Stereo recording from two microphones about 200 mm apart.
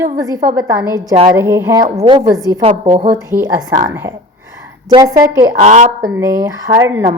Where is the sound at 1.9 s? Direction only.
25° right (ahead or behind).